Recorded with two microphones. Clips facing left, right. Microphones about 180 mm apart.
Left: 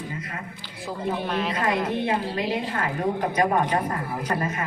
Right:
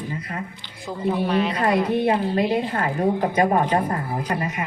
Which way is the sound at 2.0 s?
35° right (ahead or behind).